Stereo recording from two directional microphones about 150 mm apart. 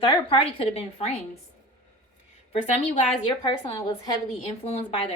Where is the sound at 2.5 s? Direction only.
45° left (ahead or behind).